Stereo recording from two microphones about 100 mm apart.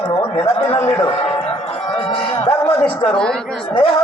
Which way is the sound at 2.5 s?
70° left (ahead or behind).